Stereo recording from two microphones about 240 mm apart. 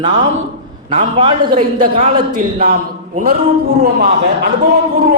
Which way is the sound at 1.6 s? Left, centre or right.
Right.